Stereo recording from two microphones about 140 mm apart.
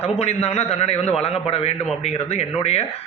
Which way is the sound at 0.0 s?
50° left (ahead or behind).